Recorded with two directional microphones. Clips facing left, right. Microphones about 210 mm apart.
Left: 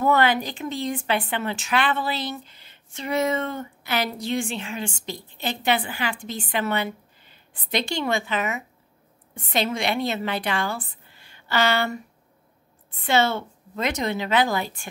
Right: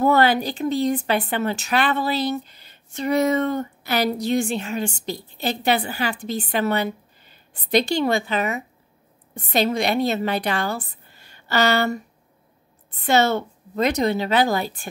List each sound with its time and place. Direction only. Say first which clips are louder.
0.0 s a woman's voice: right 3 dB; 35° right (ahead or behind)
13.0 s speech: right 3 dB; 40° right (ahead or behind)